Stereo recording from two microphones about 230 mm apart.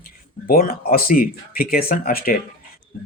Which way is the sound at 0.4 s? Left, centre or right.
Left.